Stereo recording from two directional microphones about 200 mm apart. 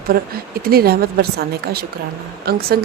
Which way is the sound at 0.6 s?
50° right (ahead or behind).